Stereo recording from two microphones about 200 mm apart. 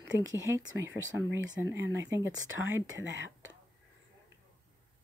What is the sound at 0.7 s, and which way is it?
Speech, 65° right (ahead or behind).